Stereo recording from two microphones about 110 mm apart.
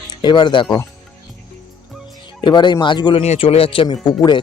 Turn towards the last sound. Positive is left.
turn(degrees=40)  # may be behind; listen again after turning